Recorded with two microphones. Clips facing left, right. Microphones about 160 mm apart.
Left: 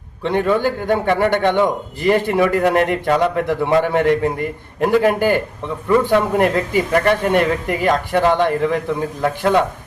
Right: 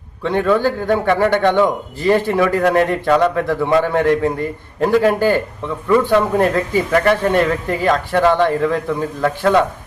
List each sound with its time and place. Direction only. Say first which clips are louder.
0.2 s a man's voice: right 1 dB; 20° left (ahead or behind)